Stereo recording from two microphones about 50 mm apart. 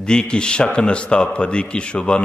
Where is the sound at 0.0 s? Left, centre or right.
Centre.